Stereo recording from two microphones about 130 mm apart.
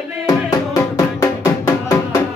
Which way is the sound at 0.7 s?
25° left (ahead or behind).